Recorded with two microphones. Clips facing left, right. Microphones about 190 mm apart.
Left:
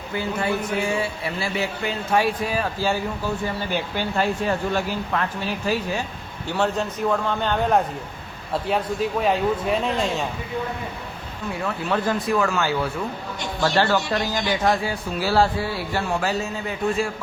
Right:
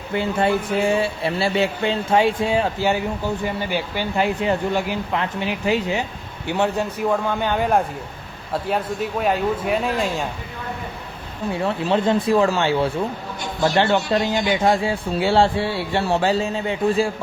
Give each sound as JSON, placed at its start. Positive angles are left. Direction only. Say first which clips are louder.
{"t": 0.2, "sound": "speech", "louder": "right 4 dB", "side_deg": -30}
{"t": 3.4, "sound": "speech", "louder": "right 2 dB", "side_deg": -10}
{"t": 11.5, "sound": "speech", "louder": "right 4 dB", "side_deg": -25}